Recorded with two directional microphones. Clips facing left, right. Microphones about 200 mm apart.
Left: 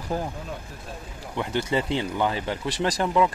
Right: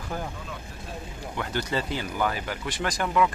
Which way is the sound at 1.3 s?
25° left (ahead or behind).